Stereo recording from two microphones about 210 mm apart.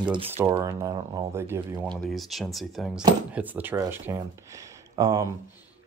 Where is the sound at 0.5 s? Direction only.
15° right (ahead or behind).